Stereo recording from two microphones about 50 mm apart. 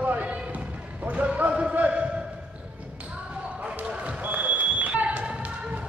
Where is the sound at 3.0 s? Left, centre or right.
Centre.